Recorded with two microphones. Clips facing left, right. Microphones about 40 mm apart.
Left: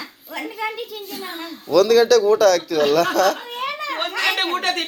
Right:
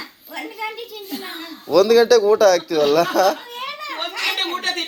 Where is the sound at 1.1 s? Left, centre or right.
Centre.